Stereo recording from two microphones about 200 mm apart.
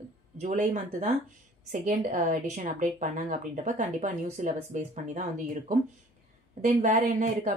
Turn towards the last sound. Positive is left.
turn(degrees=-40)  # may be behind; listen again after turning